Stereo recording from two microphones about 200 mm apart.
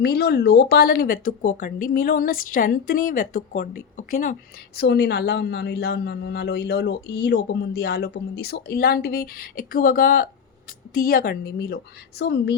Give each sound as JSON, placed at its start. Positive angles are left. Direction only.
{"t": 0.0, "sound": "a man's voice", "side_deg": 55}
{"t": 4.8, "sound": "a man's voice", "side_deg": 55}